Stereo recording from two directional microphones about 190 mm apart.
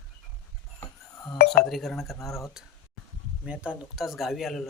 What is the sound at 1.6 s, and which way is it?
Speech, centre (ahead or behind).